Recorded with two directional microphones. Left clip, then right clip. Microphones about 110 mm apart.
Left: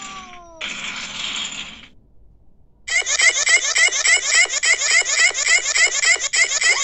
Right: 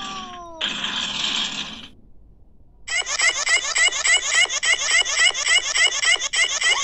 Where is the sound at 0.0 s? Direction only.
45° right (ahead or behind).